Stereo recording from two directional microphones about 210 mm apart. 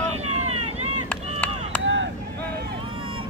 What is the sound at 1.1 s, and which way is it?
Run, 10° left (ahead or behind).